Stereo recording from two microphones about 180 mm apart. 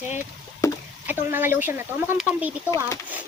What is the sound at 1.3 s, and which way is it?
Speech, 10° right (ahead or behind).